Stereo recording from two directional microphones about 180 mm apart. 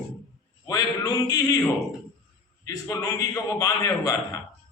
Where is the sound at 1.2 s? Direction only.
20° left (ahead or behind).